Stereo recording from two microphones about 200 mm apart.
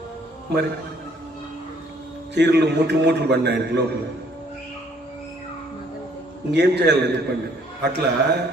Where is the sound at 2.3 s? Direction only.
60° right (ahead or behind).